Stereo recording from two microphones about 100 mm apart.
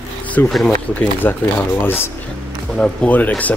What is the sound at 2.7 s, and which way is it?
Speech, 10° left (ahead or behind).